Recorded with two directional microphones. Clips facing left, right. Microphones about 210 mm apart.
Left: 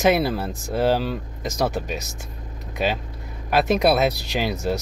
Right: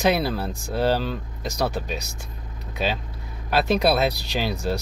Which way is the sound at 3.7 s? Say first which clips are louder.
Left 1 dB; centre (ahead or behind).